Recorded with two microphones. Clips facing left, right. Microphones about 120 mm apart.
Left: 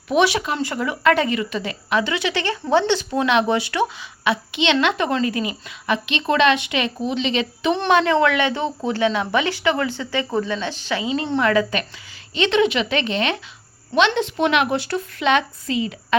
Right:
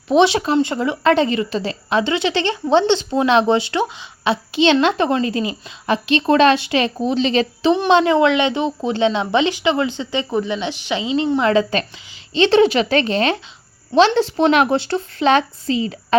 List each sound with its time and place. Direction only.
0.1 s a woman's voice: 25° right (ahead or behind)
7.9 s a woman's voice: 25° right (ahead or behind)